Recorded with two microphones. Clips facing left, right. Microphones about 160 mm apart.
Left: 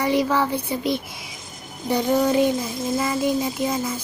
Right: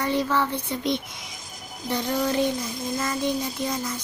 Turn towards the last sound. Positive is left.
turn(degrees=10)  # may be behind; listen again after turning